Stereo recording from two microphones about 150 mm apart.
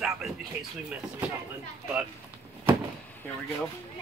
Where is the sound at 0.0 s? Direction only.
Centre (ahead or behind).